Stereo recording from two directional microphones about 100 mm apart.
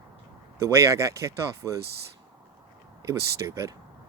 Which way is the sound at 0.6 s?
30° right (ahead or behind).